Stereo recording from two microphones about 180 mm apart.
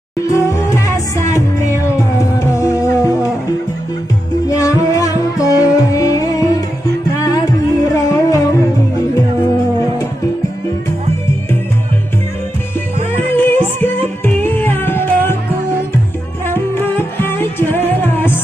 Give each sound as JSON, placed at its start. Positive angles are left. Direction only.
{"t": 0.3, "sound": "music", "side_deg": 15}
{"t": 4.5, "sound": "music", "side_deg": 20}
{"t": 13.3, "sound": "music", "side_deg": 10}
{"t": 16.5, "sound": "music", "side_deg": 10}